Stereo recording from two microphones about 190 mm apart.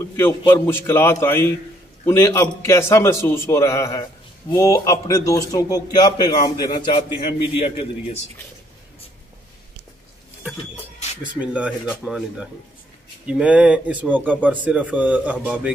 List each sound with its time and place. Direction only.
0.5 s a man's voice: 10° left (ahead or behind); by 8.2 s 30° left (ahead or behind)
11.3 s speech: 5° right (ahead or behind)